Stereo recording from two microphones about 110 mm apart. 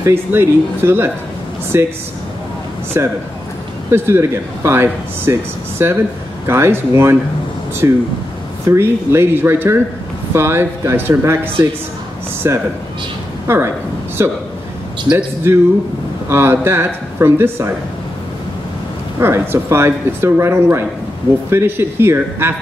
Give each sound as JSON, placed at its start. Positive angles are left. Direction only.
{"t": 0.0, "sound": "speech", "side_deg": -20}
{"t": 2.9, "sound": "speech", "side_deg": -25}
{"t": 12.4, "sound": "speech", "side_deg": -25}
{"t": 19.1, "sound": "speech", "side_deg": -20}